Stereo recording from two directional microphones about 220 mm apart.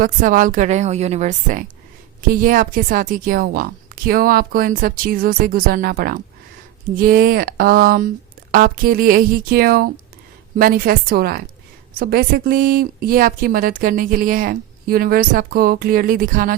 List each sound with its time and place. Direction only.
0.0 s a woman's voice: 40° right (ahead or behind)